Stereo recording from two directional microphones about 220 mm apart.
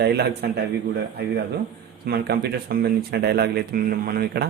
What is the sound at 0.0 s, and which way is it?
Speech, 50° right (ahead or behind).